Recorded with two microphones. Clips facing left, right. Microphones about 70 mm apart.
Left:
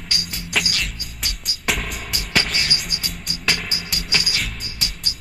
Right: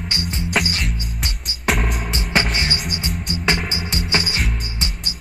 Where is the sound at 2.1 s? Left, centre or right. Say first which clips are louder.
Right 1 dB; right.